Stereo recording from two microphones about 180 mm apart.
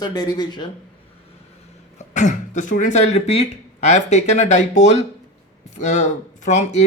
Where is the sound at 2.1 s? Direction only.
45° left (ahead or behind).